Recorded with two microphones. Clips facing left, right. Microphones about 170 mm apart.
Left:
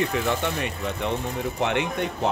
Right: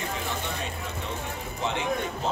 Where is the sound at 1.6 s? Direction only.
65° left (ahead or behind).